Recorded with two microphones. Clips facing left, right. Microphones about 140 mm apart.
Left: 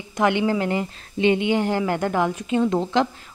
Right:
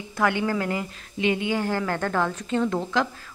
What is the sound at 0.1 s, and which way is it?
Speech, 20° left (ahead or behind).